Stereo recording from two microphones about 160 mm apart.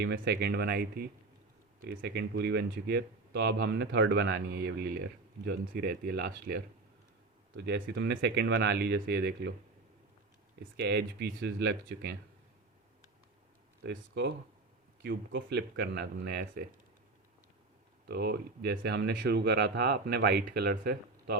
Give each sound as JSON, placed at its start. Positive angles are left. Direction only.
{"t": 0.0, "sound": "speech", "side_deg": -90}
{"t": 5.5, "sound": "speech", "side_deg": -75}
{"t": 7.5, "sound": "speech", "side_deg": -90}
{"t": 10.6, "sound": "speech", "side_deg": -90}
{"t": 13.8, "sound": "speech", "side_deg": -90}
{"t": 18.0, "sound": "speech", "side_deg": -90}